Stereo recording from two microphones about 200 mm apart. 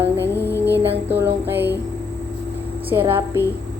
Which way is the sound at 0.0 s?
10° right (ahead or behind).